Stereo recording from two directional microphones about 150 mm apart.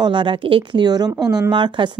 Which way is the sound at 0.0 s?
35° right (ahead or behind).